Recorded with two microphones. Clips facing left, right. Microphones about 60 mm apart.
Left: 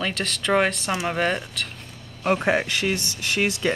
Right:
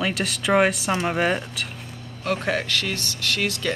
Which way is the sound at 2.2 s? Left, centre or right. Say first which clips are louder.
Left 3 dB; left.